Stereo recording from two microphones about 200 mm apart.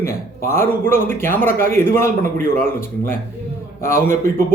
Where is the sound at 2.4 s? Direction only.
45° left (ahead or behind).